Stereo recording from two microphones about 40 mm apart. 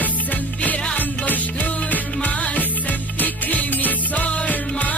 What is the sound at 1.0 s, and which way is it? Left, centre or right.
Music, left.